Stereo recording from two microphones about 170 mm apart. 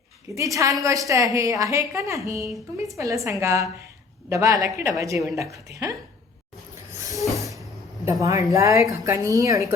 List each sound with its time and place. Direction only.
0.3 s a woman's voice: 20° right (ahead or behind)
7.4 s hiss: centre (ahead or behind)
8.2 s a woman's voice: 20° right (ahead or behind)